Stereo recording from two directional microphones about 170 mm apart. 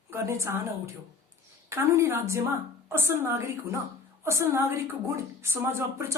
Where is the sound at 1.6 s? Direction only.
15° right (ahead or behind).